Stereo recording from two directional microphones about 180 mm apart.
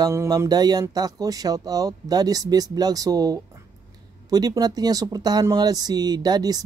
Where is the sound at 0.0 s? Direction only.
20° right (ahead or behind).